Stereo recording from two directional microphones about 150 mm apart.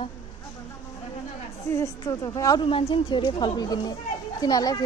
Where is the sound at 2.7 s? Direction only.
35° left (ahead or behind).